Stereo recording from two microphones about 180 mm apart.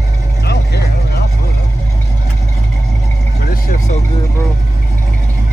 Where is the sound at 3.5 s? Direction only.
50° left (ahead or behind).